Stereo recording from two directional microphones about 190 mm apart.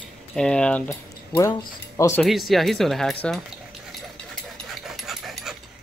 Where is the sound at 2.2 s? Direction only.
Centre (ahead or behind).